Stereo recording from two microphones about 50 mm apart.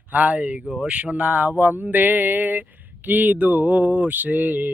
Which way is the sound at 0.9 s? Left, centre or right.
Right.